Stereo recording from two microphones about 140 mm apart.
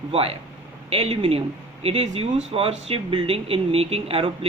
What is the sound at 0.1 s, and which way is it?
Speech, 45° right (ahead or behind).